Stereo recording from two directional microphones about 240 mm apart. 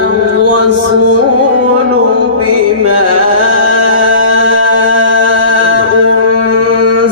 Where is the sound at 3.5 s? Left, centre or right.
Right.